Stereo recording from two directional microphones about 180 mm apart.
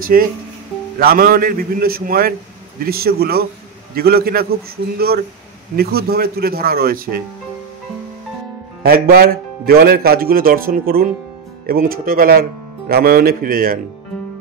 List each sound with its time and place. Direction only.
0.0 s a man's voice: 50° right (ahead or behind)
8.8 s a man's voice: 55° right (ahead or behind)